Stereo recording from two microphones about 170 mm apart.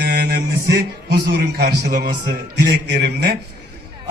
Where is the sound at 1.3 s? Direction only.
70° right (ahead or behind).